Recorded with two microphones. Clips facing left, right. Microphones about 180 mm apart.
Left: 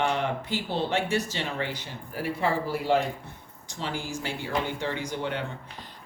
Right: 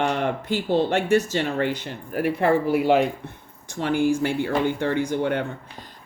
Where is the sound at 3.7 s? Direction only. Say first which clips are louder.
Right 12 dB; 55° right (ahead or behind).